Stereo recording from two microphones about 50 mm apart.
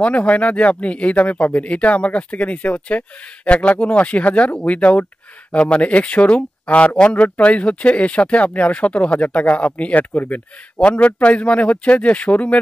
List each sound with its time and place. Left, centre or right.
0.0 s speech: left
10.8 s speech: left